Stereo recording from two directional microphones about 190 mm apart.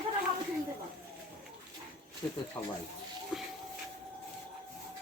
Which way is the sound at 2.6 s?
20° left (ahead or behind).